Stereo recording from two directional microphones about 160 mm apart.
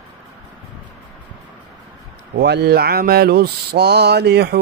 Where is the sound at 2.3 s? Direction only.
90° right.